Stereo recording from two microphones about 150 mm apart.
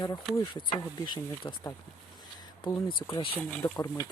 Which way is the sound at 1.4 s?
20° left (ahead or behind).